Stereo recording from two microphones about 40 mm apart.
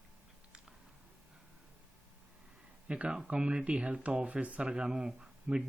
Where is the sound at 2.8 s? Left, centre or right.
Right.